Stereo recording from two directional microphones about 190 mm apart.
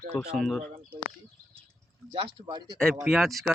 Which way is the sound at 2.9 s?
5° right (ahead or behind).